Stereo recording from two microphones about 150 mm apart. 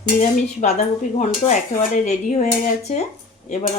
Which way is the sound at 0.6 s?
50° left (ahead or behind).